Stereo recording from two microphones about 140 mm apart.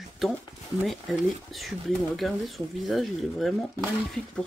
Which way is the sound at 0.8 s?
Centre (ahead or behind).